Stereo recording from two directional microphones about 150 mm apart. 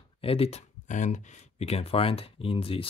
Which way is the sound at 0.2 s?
40° left (ahead or behind).